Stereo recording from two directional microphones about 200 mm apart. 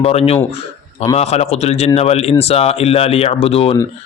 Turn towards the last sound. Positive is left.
turn(degrees=30)  # may be behind; listen again after turning